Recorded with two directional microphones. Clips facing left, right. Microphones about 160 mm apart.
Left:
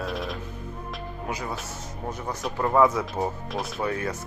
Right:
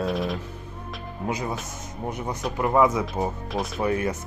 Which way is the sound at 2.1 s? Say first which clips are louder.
Right 2 dB; 15° right (ahead or behind).